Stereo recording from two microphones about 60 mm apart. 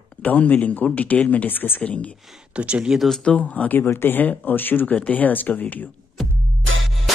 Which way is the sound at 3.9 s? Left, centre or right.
Left.